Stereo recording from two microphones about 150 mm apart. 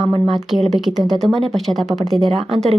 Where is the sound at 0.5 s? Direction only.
Centre (ahead or behind).